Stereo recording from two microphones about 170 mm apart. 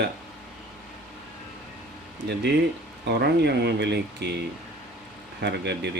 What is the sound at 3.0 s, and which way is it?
Speech, 80° right.